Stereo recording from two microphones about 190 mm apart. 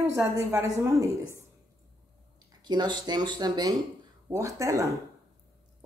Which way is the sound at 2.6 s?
20° right (ahead or behind).